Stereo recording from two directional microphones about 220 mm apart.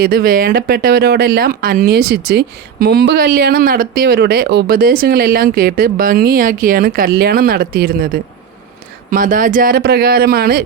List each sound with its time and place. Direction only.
0.0 s speech: 45° right (ahead or behind)